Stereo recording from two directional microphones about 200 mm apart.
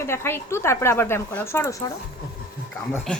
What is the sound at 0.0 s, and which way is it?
A woman's voice, 10° left (ahead or behind).